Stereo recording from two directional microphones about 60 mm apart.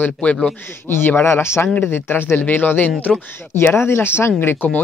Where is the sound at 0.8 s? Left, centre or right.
Left.